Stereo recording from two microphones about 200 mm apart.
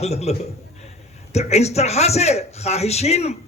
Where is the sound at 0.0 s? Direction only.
30° left (ahead or behind).